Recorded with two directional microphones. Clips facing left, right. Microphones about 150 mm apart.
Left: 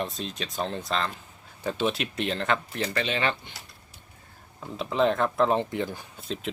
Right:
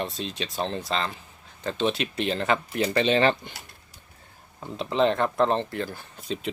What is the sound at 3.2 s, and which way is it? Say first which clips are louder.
Speech: right 6 dB; 35° right (ahead or behind).